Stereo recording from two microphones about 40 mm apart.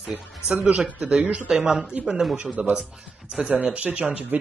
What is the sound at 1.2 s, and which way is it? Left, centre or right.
Speech, right.